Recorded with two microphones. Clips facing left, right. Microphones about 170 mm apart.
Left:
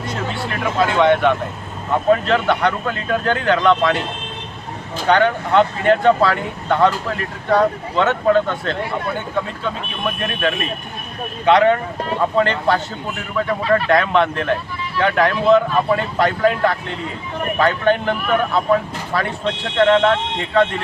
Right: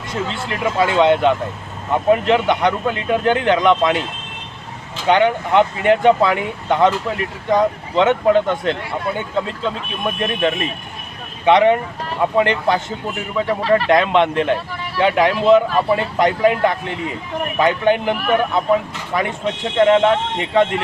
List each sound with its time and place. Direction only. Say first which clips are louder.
0.8 s speech: even; 15° right (ahead or behind)
5.0 s speech: right 1 dB; 15° right (ahead or behind)